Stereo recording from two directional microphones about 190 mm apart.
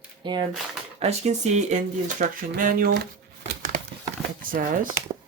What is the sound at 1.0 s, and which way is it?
Speech, 35° right (ahead or behind).